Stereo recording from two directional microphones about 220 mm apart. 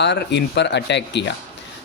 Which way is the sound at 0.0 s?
50° left (ahead or behind).